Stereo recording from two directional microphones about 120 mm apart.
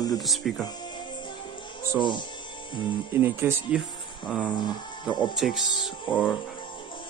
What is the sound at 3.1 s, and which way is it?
Speech, 15° right (ahead or behind).